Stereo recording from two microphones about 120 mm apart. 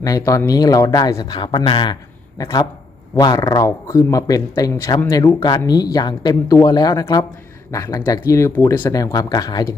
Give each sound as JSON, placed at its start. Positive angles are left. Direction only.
{"t": 0.0, "sound": "speech", "side_deg": 25}
{"t": 2.4, "sound": "speech", "side_deg": 30}
{"t": 8.9, "sound": "speech", "side_deg": 30}